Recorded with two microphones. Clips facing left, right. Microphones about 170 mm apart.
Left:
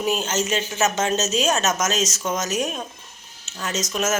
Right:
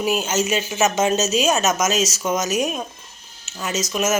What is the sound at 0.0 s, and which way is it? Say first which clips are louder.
Speech: right 2 dB; 10° right (ahead or behind).